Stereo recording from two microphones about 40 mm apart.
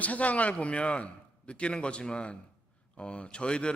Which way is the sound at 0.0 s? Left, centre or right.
Left.